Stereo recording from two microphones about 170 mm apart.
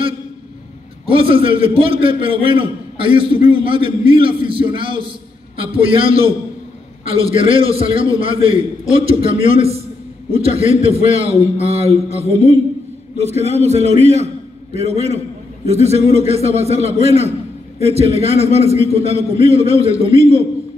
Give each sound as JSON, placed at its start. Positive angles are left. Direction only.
{"t": 1.0, "sound": "a man's voice", "side_deg": -30}